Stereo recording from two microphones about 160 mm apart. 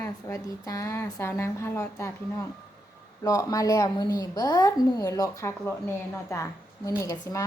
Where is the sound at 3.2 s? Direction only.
20° left (ahead or behind).